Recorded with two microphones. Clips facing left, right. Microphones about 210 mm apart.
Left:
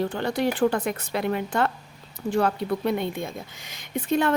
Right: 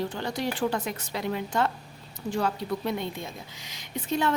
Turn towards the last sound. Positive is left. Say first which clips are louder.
# left 4 dB
turn(degrees=55)  # may be behind; listen again after turning